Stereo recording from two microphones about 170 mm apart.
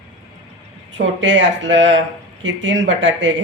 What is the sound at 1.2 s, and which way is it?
Speech, 90° right.